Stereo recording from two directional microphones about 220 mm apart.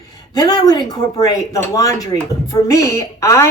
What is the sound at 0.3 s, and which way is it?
Speech, 15° left (ahead or behind).